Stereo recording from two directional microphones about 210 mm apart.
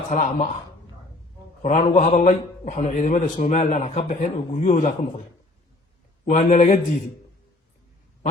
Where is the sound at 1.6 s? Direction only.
35° left (ahead or behind).